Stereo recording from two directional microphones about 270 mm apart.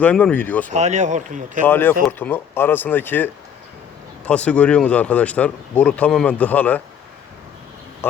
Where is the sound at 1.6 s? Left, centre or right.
Centre.